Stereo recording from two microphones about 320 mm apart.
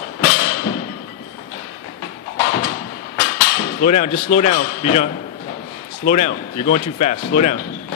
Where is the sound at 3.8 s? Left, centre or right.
Left.